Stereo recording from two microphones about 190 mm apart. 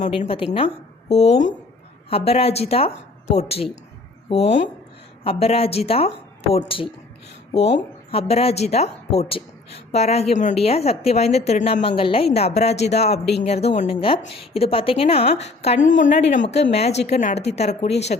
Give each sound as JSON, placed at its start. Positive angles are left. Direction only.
{"t": 0.0, "sound": "a woman's voice", "side_deg": 35}